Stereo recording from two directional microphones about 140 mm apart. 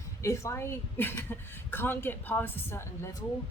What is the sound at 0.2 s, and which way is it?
A woman's voice, 20° left (ahead or behind).